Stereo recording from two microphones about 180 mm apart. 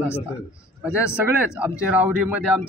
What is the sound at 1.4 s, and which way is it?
Speech, 5° right (ahead or behind).